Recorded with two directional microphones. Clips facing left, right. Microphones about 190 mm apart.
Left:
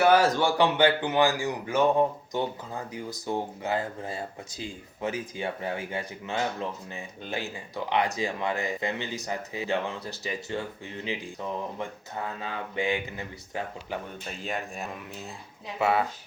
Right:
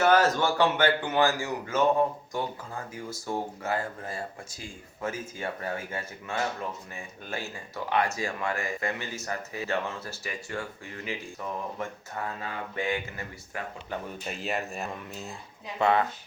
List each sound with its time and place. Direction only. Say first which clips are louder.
0.0 s speech: left 1 dB; 10° left (ahead or behind)
14.3 s speech: right 3 dB; 5° right (ahead or behind)